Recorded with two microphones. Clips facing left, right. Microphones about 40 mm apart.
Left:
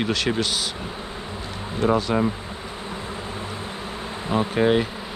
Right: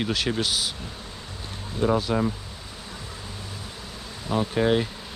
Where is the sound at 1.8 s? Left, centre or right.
Left.